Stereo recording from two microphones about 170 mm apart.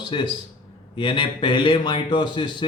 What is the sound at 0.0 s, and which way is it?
A man's voice, 25° left (ahead or behind).